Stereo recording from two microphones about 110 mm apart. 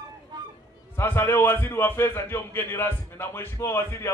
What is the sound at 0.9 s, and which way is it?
A man's voice, 20° left (ahead or behind).